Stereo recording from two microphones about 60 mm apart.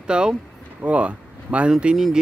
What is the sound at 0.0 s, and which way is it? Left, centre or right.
Speech, centre.